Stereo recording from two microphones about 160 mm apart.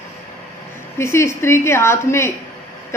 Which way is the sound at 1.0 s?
15° left (ahead or behind).